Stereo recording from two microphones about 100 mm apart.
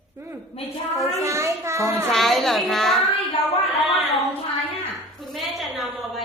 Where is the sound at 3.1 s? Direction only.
75° left (ahead or behind).